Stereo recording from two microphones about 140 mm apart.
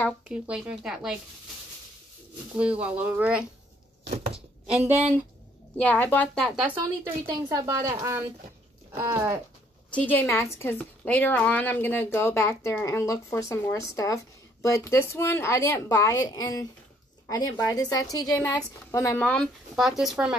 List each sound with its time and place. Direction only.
0.3 s speech: 5° right (ahead or behind)
2.5 s speech: 10° right (ahead or behind)
5.8 s a woman's voice: 10° left (ahead or behind)
7.2 s a woman's voice: 25° right (ahead or behind)
9.8 s a woman's voice: 10° left (ahead or behind)